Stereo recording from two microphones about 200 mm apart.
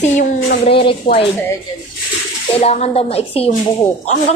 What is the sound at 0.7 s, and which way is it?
Speech, 25° left (ahead or behind).